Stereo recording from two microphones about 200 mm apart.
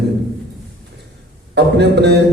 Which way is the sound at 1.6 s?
55° right (ahead or behind).